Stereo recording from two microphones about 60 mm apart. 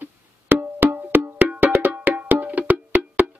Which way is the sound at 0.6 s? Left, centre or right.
Right.